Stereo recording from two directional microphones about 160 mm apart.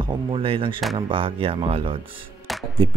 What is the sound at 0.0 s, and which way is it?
Speech, 30° right (ahead or behind).